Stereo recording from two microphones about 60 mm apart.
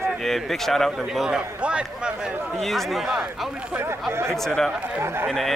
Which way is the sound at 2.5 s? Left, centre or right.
Centre.